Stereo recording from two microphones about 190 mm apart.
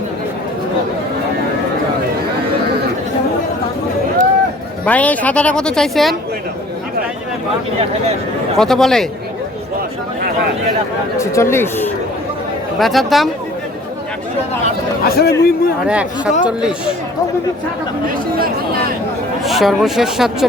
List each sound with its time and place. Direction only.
4.9 s speech: 5° left (ahead or behind)
8.5 s speech: centre (ahead or behind)
11.2 s speech: 15° left (ahead or behind)
12.8 s speech: centre (ahead or behind)
15.0 s speech: 55° left (ahead or behind)
15.9 s speech: 5° right (ahead or behind)
18.3 s speech: 50° right (ahead or behind)
19.5 s speech: centre (ahead or behind)